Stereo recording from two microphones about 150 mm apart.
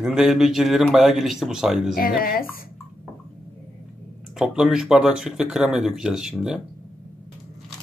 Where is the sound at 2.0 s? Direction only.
80° left.